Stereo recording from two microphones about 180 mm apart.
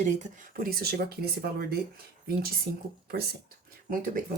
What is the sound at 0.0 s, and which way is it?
Speech, 45° right (ahead or behind).